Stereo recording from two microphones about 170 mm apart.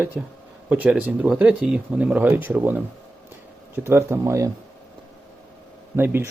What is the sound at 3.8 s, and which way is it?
Speech, 15° right (ahead or behind).